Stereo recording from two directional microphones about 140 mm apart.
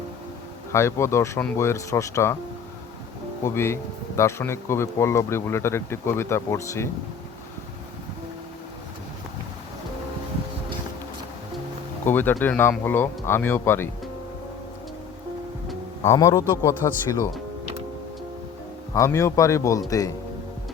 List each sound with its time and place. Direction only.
0.7 s speech: 20° left (ahead or behind)
3.4 s speech: 20° left (ahead or behind)
12.0 s speech: 15° left (ahead or behind)
16.0 s speech: 25° left (ahead or behind)
18.9 s speech: 20° left (ahead or behind)